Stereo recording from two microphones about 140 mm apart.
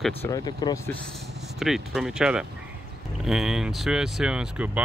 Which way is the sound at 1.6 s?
Centre (ahead or behind).